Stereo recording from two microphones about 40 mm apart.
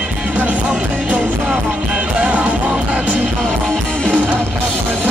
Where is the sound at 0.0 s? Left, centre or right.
Right.